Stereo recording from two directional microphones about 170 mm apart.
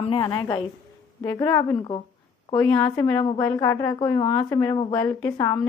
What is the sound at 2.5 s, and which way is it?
A woman's voice, 10° left (ahead or behind).